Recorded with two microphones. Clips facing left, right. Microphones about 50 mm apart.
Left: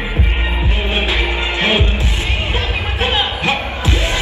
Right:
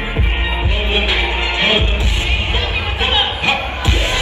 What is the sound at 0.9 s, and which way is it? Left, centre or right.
Music, right.